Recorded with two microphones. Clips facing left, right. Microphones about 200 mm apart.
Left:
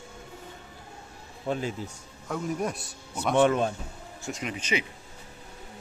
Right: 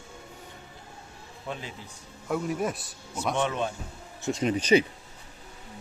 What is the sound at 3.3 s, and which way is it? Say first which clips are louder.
Speech: left 7 dB; 50° left (ahead or behind).